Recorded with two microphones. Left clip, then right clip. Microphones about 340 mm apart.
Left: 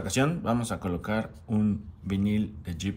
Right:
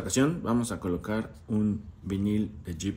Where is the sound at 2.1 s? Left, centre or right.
Centre.